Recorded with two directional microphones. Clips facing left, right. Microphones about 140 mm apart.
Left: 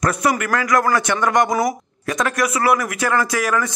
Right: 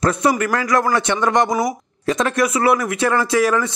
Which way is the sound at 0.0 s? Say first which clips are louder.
Right 2 dB; 25° right (ahead or behind).